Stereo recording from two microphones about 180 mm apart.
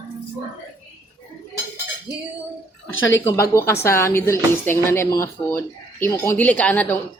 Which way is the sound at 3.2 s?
15° left (ahead or behind).